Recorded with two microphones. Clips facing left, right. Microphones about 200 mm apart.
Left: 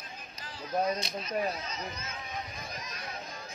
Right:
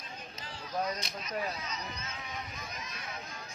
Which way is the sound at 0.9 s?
30° left (ahead or behind).